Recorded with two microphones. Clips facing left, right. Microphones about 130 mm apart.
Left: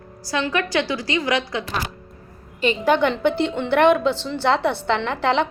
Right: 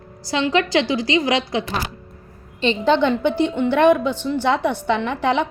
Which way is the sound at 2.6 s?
25° right (ahead or behind).